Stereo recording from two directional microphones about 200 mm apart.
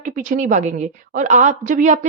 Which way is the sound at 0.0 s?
40° right (ahead or behind).